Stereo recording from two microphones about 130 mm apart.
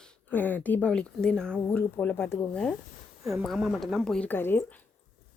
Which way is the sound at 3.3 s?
Centre (ahead or behind).